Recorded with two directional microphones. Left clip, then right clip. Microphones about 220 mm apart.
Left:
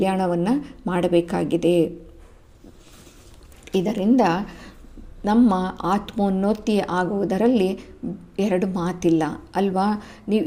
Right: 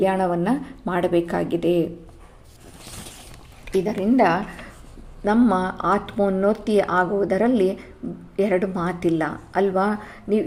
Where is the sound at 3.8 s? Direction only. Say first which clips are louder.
Right 1 dB; 25° left (ahead or behind).